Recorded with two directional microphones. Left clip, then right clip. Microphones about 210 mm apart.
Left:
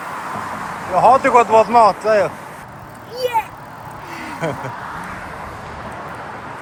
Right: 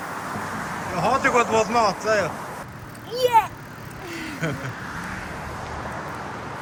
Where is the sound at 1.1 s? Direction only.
20° left (ahead or behind).